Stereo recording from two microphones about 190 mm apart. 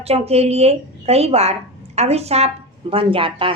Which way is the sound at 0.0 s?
35° right (ahead or behind).